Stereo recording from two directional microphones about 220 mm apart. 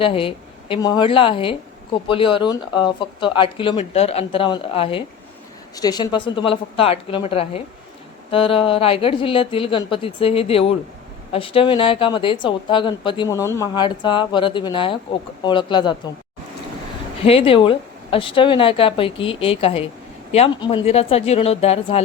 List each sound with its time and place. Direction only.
0.0 s speech: 25° left (ahead or behind)
17.2 s speech: 25° left (ahead or behind)